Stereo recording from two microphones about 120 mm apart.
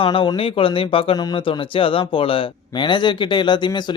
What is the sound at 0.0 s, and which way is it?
Speech, 45° left (ahead or behind).